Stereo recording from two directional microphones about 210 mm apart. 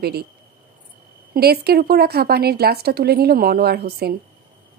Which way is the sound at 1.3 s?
50° right (ahead or behind).